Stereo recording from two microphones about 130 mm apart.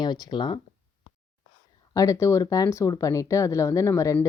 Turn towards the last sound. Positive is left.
turn(degrees=25)  # may be behind; listen again after turning